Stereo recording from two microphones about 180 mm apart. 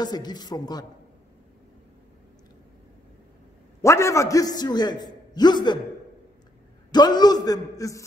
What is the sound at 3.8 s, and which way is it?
A man's voice, 15° left (ahead or behind).